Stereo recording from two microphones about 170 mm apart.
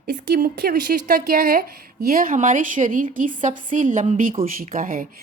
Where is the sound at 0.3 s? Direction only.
60° right (ahead or behind).